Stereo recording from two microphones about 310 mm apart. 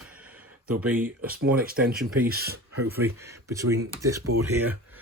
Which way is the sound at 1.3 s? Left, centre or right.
Right.